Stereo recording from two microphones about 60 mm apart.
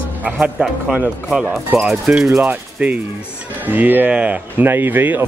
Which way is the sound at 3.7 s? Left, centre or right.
Right.